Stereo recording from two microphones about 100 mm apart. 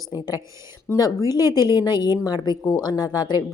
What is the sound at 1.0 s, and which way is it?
Speech, 40° left (ahead or behind).